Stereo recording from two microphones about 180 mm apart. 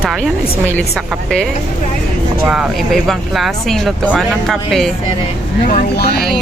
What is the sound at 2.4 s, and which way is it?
Speech, 5° right (ahead or behind).